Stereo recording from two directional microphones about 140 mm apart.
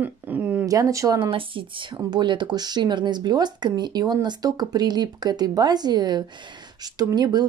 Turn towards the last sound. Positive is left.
turn(degrees=-30)  # may be behind; listen again after turning